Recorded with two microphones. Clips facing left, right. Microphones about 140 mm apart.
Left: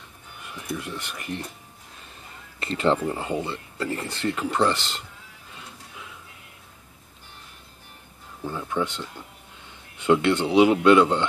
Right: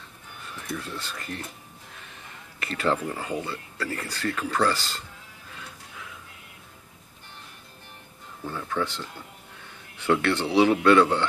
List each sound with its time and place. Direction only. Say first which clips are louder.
0.4 s speech: left 2 dB; 15° left (ahead or behind)
2.6 s speech: left 4 dB; 25° left (ahead or behind)
8.5 s speech: left 2 dB; 15° left (ahead or behind)